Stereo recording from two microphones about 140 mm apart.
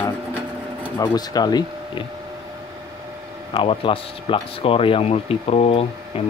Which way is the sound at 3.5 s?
40° left (ahead or behind).